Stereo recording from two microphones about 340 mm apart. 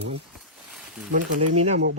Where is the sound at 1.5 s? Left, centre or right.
Centre.